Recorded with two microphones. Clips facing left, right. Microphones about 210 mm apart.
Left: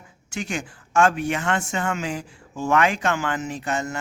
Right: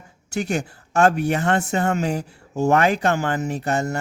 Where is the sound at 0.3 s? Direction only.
40° right (ahead or behind).